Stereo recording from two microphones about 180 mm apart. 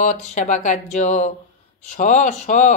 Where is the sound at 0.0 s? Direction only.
40° left (ahead or behind).